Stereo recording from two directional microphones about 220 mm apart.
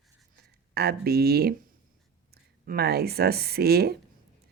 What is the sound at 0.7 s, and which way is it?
A woman's voice, 45° right (ahead or behind).